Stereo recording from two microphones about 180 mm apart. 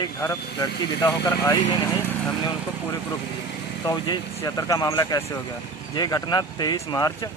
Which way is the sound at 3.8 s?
25° left (ahead or behind).